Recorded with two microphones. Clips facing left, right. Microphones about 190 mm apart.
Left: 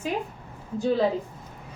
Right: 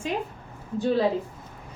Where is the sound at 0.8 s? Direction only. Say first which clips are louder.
Even; centre (ahead or behind).